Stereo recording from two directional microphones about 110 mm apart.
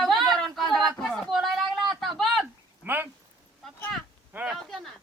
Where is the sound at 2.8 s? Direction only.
20° right (ahead or behind).